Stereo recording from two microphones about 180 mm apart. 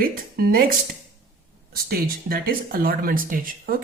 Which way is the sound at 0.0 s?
50° right (ahead or behind).